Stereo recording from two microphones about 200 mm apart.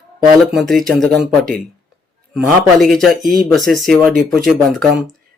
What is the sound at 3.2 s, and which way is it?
Speech, 45° right (ahead or behind).